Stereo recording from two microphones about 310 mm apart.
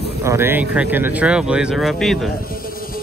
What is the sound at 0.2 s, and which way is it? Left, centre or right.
Speech, centre.